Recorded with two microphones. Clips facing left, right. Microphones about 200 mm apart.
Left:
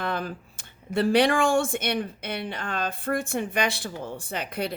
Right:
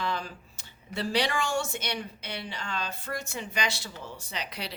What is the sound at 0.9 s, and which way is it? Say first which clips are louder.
A woman's voice: left 8 dB; 55° left (ahead or behind).